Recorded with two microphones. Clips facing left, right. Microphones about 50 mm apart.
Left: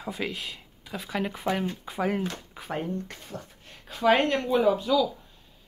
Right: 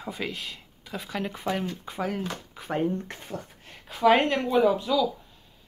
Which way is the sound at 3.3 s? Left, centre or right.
Centre.